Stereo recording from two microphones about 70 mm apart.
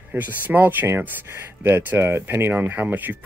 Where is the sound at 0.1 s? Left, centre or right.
Right.